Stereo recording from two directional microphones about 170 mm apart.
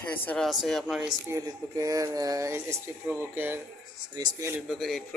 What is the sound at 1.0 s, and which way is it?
Speech, 20° right (ahead or behind).